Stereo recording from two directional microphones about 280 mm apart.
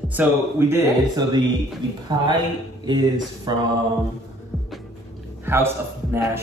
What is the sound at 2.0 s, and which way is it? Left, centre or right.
Speech, centre.